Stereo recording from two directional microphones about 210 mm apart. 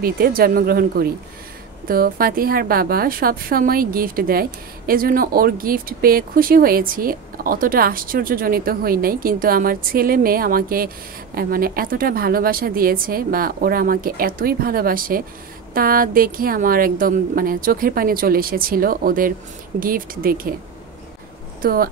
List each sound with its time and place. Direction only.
0.0 s a woman's voice: 45° right (ahead or behind)